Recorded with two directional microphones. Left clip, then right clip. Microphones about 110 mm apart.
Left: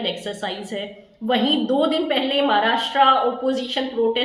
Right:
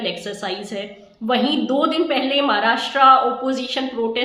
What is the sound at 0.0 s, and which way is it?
A woman's voice, 25° right (ahead or behind).